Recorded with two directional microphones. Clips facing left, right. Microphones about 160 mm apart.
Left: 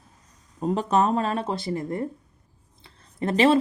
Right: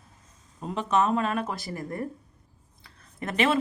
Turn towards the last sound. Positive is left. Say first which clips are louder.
# left 6 dB
turn(degrees=30)  # may be behind; listen again after turning